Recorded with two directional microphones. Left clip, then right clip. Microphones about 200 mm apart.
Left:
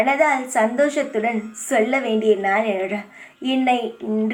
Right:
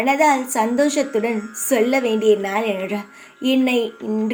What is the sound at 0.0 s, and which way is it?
A woman's voice, 40° right (ahead or behind).